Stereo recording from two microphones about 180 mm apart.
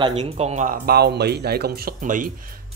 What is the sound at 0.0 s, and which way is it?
Speech, 35° right (ahead or behind).